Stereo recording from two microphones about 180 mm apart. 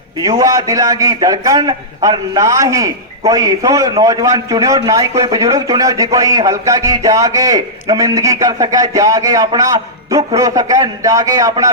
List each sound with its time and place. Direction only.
0.2 s a man's voice: 20° right (ahead or behind)